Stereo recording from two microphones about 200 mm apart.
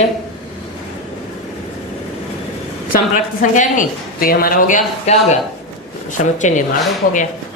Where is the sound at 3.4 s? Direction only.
40° left (ahead or behind).